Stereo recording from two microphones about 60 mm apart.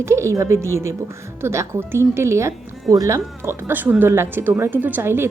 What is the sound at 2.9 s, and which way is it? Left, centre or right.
Speech, right.